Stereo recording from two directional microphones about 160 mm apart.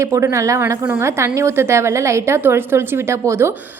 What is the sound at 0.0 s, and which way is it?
A woman's voice, 20° right (ahead or behind).